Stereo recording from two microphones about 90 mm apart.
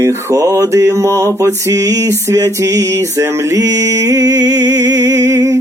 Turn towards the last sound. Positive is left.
turn(degrees=-35)  # may be behind; listen again after turning